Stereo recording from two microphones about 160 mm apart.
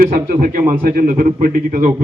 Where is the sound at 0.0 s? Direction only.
60° right (ahead or behind).